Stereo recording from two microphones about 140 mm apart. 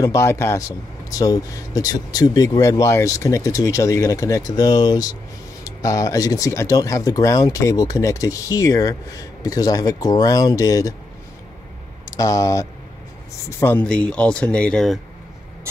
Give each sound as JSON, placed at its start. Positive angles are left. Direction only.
{"t": 0.0, "sound": "speech", "side_deg": 20}
{"t": 12.2, "sound": "speech", "side_deg": 25}